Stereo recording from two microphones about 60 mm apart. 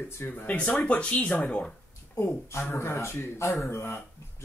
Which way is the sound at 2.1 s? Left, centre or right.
Left.